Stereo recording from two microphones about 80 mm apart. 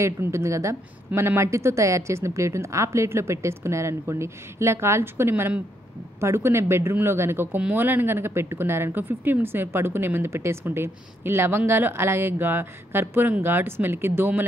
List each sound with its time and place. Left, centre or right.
0.0 s a woman's voice: right